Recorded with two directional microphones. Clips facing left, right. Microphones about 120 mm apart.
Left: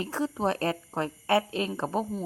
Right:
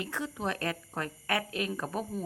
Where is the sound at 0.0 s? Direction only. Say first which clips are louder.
Left 6 dB; 35° left (ahead or behind).